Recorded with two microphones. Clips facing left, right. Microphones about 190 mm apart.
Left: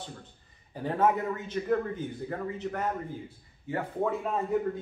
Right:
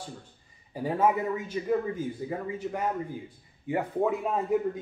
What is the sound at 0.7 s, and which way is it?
A man's voice, 10° right (ahead or behind).